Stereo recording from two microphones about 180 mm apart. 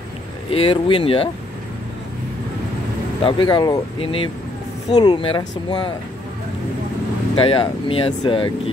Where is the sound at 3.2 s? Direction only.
30° left (ahead or behind).